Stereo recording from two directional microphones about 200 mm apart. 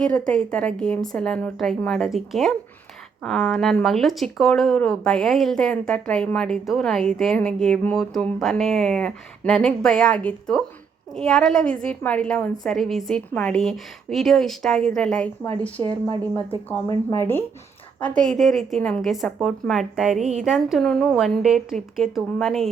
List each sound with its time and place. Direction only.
0.0 s speech: 5° left (ahead or behind)
15.8 s a woman's voice: 20° right (ahead or behind)
16.3 s speech: 10° left (ahead or behind)